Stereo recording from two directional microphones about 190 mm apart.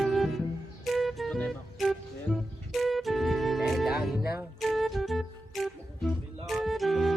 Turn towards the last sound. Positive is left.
turn(degrees=0)  # may be behind; listen again after turning